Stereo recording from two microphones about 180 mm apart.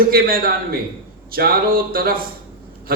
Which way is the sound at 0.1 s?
55° right (ahead or behind).